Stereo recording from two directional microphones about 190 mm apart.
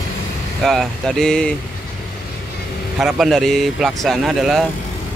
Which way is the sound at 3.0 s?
Centre (ahead or behind).